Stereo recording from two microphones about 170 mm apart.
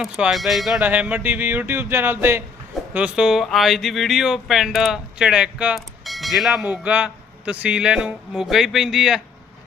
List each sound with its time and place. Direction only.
0.0 s speech: centre (ahead or behind)